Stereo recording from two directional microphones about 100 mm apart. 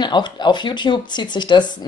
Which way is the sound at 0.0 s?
50° left (ahead or behind).